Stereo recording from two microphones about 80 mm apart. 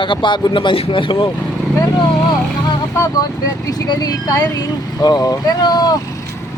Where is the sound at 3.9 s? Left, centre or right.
Left.